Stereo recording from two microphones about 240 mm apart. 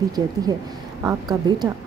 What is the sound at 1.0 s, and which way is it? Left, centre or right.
Speech, centre.